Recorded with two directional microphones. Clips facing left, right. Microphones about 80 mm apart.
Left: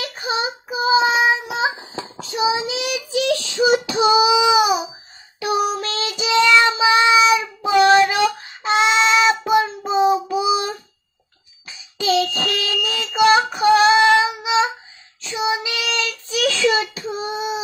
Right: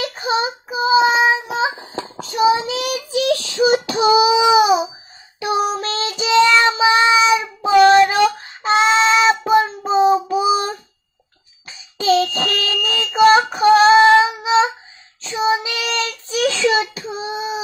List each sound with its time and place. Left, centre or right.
0.0 s child singing: right
11.6 s a sound: right
15.2 s child singing: right